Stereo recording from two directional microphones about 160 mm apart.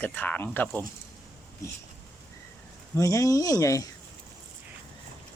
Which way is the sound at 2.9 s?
20° left (ahead or behind).